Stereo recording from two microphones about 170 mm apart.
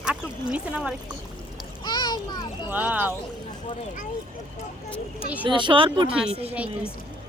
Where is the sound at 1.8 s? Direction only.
25° left (ahead or behind).